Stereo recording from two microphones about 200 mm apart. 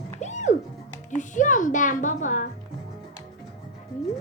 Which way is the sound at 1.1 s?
40° left (ahead or behind).